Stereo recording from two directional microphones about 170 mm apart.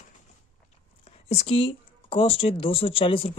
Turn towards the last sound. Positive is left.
turn(degrees=30)  # may be behind; listen again after turning